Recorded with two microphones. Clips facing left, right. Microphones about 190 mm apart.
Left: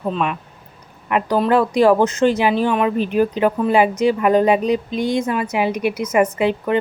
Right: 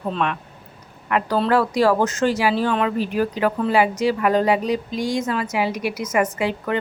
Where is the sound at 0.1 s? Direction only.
10° left (ahead or behind).